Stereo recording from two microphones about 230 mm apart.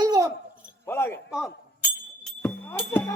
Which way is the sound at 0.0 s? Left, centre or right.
Centre.